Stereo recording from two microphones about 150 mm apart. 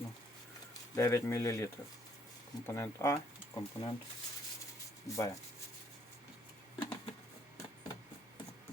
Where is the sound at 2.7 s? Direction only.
20° left (ahead or behind).